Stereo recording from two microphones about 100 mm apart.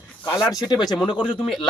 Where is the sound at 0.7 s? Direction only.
40° left (ahead or behind).